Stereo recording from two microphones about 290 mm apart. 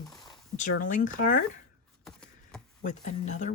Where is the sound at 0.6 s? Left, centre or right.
Left.